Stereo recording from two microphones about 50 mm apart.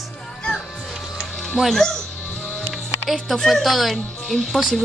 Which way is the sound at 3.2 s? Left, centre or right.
Centre.